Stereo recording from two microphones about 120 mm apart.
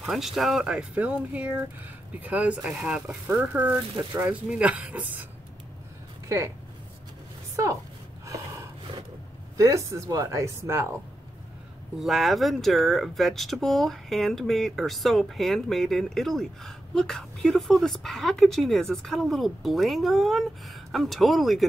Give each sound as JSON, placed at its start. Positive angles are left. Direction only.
{"t": 0.0, "sound": "speech", "side_deg": 0}
{"t": 6.2, "sound": "speech", "side_deg": -25}
{"t": 9.6, "sound": "speech", "side_deg": -25}
{"t": 12.0, "sound": "speech", "side_deg": 0}